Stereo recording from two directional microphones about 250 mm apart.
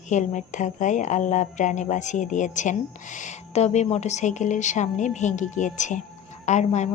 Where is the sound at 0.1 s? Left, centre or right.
Left.